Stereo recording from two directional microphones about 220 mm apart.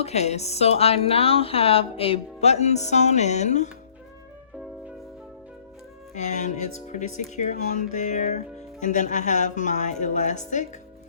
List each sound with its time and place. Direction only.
0.0 s a woman's voice: 30° left (ahead or behind)
6.1 s speech: 35° left (ahead or behind)